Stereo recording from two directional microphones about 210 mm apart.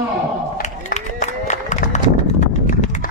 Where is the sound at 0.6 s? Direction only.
35° left (ahead or behind).